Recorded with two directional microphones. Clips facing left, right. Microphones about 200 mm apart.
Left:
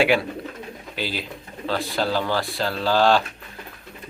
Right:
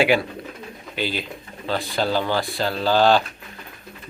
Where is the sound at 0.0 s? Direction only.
Centre (ahead or behind).